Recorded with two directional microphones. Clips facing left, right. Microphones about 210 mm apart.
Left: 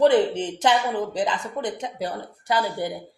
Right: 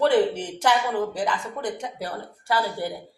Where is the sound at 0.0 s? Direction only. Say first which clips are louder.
Left 2 dB; 20° left (ahead or behind).